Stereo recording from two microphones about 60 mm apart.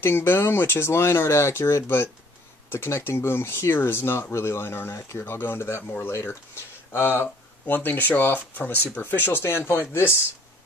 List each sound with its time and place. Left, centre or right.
0.0 s speech: left